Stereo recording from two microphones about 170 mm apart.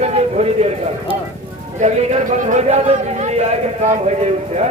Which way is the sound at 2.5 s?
40° right (ahead or behind).